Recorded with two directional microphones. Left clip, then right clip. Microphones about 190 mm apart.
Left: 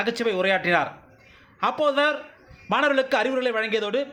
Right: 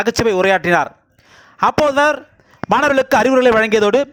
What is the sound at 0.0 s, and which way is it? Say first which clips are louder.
A man's voice: right 9 dB; 60° right (ahead or behind).